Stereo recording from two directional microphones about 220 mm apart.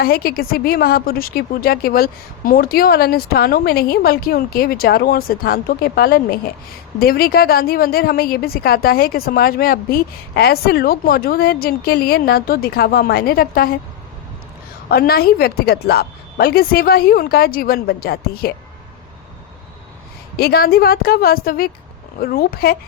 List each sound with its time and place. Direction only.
0.0 s a woman's voice: 45° left (ahead or behind)
14.8 s a woman's voice: 45° left (ahead or behind)
20.3 s a woman's voice: 45° left (ahead or behind)